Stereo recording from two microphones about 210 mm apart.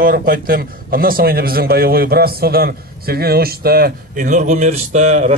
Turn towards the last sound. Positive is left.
turn(degrees=-35)  # may be behind; listen again after turning